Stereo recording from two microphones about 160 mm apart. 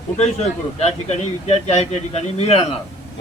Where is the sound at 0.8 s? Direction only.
40° left (ahead or behind).